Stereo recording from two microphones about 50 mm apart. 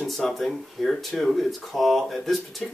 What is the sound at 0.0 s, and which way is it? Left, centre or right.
Speech, centre.